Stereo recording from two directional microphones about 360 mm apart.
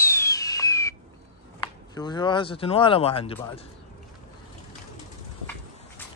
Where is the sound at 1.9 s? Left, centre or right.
Centre.